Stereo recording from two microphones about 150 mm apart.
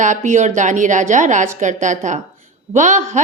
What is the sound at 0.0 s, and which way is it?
A woman's voice, 55° right (ahead or behind).